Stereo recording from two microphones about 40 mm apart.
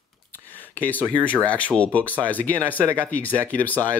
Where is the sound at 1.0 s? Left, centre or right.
Left.